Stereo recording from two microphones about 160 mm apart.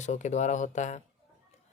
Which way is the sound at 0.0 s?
50° left (ahead or behind).